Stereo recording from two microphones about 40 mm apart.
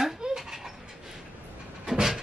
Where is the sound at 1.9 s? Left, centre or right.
Centre.